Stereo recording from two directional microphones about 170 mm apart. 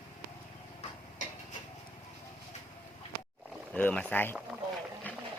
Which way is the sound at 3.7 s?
10° left (ahead or behind).